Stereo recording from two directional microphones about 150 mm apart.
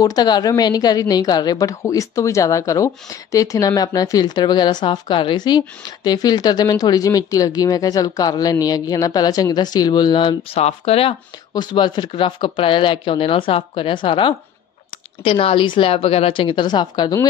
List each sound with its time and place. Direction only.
0.0 s a woman's voice: 25° left (ahead or behind)
11.5 s speech: 30° left (ahead or behind)